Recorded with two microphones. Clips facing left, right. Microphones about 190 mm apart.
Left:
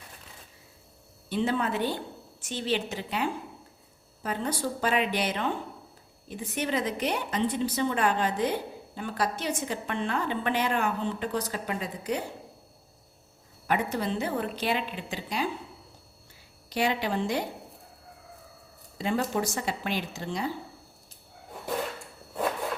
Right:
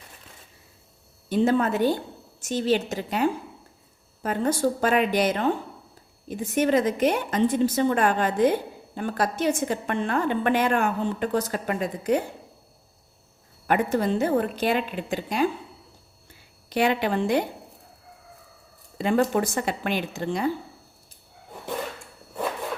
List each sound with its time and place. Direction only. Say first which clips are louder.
1.3 s a woman's voice: right 6 dB; 45° right (ahead or behind)
13.7 s a woman's voice: right 6 dB; 50° right (ahead or behind)
16.6 s speech: right 5 dB; 55° right (ahead or behind)
18.9 s speech: right 6 dB; 55° right (ahead or behind)